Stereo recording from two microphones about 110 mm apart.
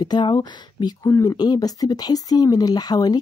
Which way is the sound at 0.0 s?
45° left (ahead or behind).